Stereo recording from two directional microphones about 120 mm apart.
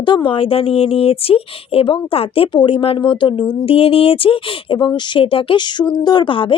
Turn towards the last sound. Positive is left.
turn(degrees=45)  # may be behind; listen again after turning